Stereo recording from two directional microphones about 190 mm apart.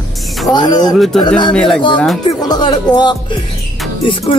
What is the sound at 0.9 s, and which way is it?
Speech, centre (ahead or behind).